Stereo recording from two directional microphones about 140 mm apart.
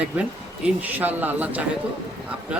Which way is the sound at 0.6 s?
10° right (ahead or behind).